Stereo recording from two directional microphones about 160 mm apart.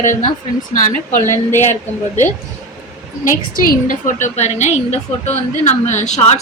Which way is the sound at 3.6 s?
60° left (ahead or behind).